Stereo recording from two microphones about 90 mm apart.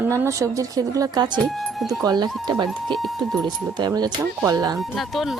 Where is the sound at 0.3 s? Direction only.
35° right (ahead or behind).